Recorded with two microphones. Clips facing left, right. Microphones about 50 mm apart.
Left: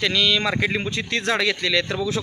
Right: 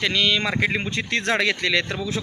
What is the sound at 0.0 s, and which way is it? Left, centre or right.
Speech, right.